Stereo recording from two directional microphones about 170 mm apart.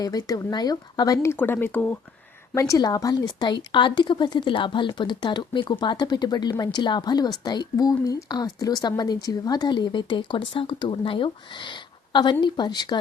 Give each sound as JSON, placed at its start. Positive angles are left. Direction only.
{"t": 0.0, "sound": "a woman's voice", "side_deg": 20}
{"t": 2.6, "sound": "a woman's voice", "side_deg": 20}